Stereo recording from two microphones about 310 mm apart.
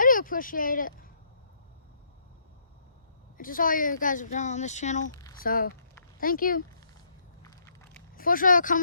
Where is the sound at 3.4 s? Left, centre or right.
Left.